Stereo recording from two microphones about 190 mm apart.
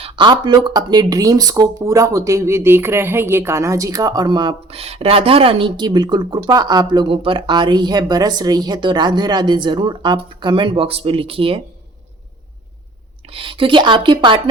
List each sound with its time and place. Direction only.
0.0 s speech: 25° right (ahead or behind)
13.2 s speech: 25° right (ahead or behind)